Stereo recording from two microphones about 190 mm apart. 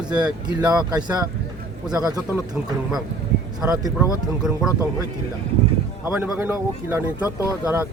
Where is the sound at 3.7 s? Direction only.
15° right (ahead or behind).